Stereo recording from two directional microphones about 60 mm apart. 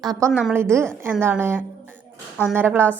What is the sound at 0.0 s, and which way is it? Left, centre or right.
Speech, right.